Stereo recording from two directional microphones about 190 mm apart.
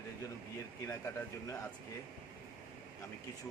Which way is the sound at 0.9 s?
15° left (ahead or behind).